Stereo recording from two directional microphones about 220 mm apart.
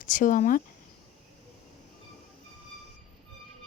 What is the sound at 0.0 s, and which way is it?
Speech, 35° left (ahead or behind).